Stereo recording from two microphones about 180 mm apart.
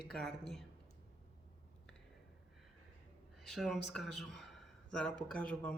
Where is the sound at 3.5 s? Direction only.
Centre (ahead or behind).